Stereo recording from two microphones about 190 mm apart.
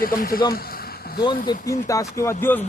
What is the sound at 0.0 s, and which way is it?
Speech, 50° left (ahead or behind).